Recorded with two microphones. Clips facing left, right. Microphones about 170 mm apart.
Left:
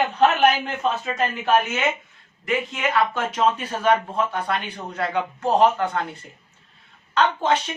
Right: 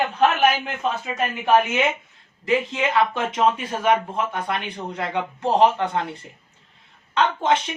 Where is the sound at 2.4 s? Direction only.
25° right (ahead or behind).